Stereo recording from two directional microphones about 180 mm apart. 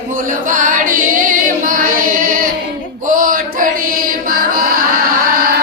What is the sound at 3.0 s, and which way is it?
Chant, 50° right (ahead or behind).